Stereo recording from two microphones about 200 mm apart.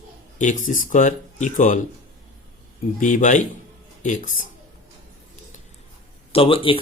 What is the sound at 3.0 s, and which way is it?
Speech, 40° left (ahead or behind).